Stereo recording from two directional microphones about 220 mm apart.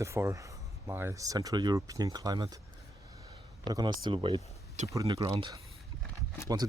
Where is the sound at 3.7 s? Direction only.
20° right (ahead or behind).